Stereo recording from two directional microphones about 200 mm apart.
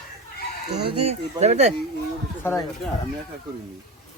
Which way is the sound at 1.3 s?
35° right (ahead or behind).